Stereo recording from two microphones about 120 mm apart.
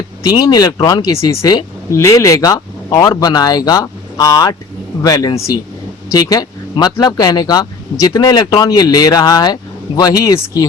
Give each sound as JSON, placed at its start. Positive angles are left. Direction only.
{"t": 0.2, "sound": "speech", "side_deg": 30}